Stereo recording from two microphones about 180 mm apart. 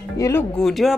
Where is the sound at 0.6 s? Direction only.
Centre (ahead or behind).